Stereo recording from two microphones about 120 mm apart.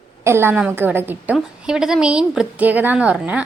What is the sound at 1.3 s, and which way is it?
A woman's voice, 5° right (ahead or behind).